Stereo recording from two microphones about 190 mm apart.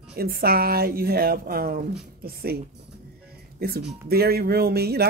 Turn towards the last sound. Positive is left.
turn(degrees=-55)  # may be behind; listen again after turning